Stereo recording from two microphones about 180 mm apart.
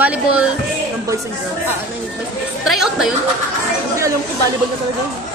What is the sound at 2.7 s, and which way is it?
Speech, 5° right (ahead or behind).